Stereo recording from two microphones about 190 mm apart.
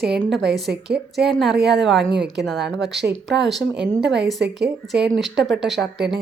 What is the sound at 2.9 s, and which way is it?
Speech, 65° right (ahead or behind).